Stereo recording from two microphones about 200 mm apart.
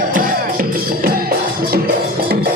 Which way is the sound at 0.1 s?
45° right (ahead or behind).